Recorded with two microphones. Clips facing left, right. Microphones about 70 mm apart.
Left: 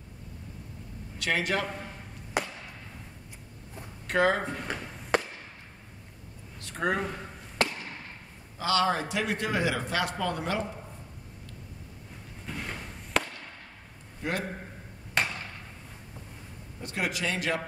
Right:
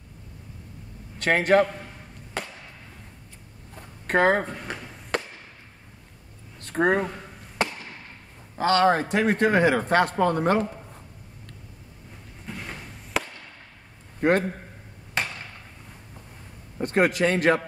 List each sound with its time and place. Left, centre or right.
1.2 s a man's voice: right
2.4 s chop: centre
4.1 s a man's voice: right
4.5 s a sound: centre
6.6 s a sound: right
8.5 s a man's voice: right
12.4 s a sound: centre
14.2 s a man's voice: right
15.2 s chop: centre
16.7 s a man's voice: right